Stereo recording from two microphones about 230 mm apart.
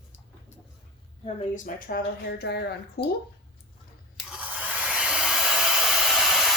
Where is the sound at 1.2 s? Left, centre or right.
Left.